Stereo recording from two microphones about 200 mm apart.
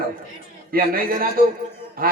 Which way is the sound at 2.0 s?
45° right (ahead or behind).